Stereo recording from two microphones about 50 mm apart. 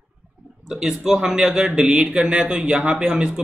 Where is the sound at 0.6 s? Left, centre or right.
Centre.